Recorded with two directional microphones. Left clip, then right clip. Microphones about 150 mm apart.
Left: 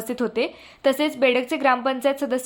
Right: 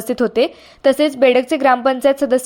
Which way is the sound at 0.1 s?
40° right (ahead or behind).